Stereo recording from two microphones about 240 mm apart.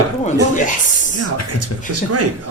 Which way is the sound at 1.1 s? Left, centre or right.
Right.